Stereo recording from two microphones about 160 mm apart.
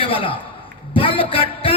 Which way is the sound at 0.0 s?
35° left (ahead or behind).